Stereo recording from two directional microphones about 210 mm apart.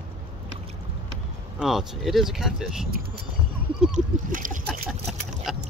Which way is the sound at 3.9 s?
40° right (ahead or behind).